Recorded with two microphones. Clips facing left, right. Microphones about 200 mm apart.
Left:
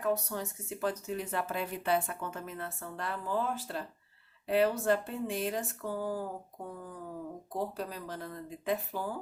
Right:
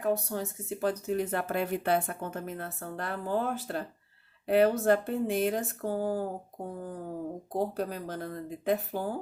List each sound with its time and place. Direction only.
0.0 s speech: 35° right (ahead or behind)
1.0 s a woman's voice: 55° right (ahead or behind)
7.5 s speech: 50° right (ahead or behind)